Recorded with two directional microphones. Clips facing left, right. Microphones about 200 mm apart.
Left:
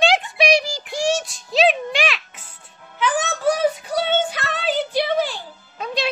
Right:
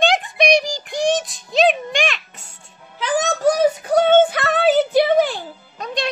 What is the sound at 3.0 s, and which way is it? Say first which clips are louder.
Child singing: right 3 dB; 40° right (ahead or behind).